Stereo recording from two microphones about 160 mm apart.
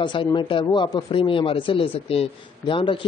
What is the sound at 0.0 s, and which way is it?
Speech, 30° left (ahead or behind).